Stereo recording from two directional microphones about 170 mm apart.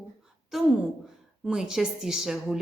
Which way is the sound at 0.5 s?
Centre (ahead or behind).